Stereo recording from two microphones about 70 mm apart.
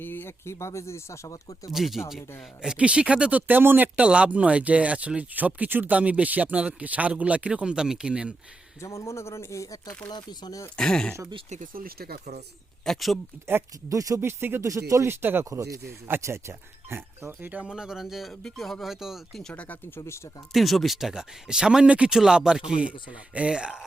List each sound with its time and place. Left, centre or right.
0.0 s speech: left
1.7 s speech: centre
8.8 s speech: left
10.1 s speech: left
10.8 s speech: centre
12.8 s speech: centre
13.9 s speech: right
14.2 s speech: right
14.6 s speech: right
15.4 s speech: right
16.0 s speech: right
17.6 s speech: centre
20.5 s speech: centre